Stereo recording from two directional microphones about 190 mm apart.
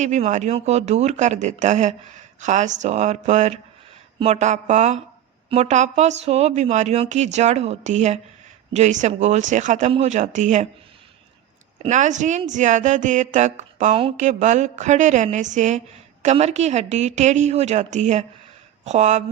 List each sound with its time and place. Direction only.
0.0 s speech: 40° right (ahead or behind)
11.8 s speech: 40° right (ahead or behind)